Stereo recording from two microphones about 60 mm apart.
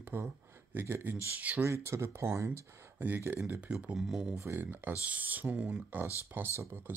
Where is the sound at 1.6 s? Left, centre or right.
Right.